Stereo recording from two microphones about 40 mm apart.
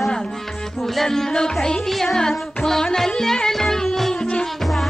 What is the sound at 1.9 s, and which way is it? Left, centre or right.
Music, centre.